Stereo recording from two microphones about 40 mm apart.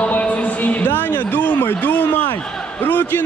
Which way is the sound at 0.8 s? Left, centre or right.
Left.